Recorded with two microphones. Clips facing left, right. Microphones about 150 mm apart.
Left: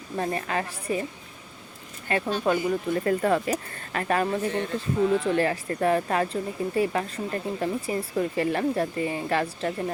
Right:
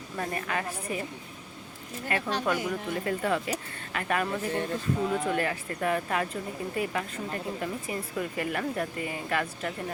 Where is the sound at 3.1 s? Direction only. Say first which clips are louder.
Left 5 dB; 40° left (ahead or behind).